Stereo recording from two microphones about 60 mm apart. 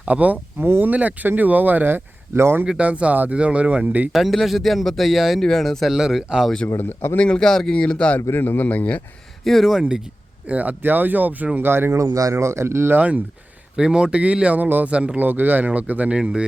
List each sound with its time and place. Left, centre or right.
0.0 s speech: right
0.6 s speech: right
2.6 s speech: centre
4.1 s speech: centre
6.7 s speech: left
7.2 s speech: centre
8.3 s a man's voice: left
9.4 s speech: centre
10.5 s speech: right
11.9 s speech: right
13.0 s speech: right
13.7 s speech: centre
16.1 s speech: centre